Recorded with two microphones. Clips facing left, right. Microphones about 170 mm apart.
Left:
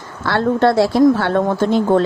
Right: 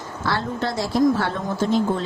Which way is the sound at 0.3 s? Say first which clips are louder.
Left 10 dB; 65° left (ahead or behind).